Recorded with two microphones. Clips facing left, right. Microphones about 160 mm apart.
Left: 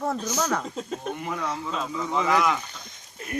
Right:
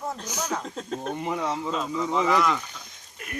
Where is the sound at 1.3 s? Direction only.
25° right (ahead or behind).